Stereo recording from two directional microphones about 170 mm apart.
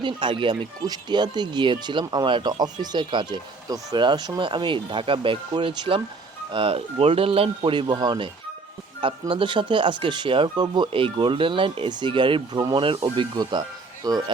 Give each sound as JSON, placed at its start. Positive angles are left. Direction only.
{"t": 0.0, "sound": "speech", "side_deg": -30}